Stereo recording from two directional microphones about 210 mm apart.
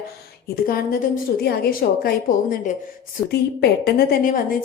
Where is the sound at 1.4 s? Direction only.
45° left (ahead or behind).